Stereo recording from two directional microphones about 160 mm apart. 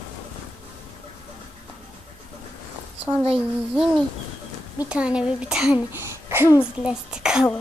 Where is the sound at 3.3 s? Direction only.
5° right (ahead or behind).